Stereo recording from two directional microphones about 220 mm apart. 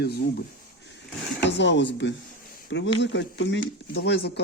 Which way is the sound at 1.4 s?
55° left (ahead or behind).